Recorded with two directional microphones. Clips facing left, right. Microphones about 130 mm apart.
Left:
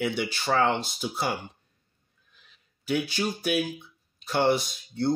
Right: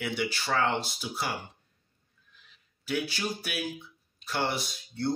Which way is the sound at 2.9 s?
20° left (ahead or behind).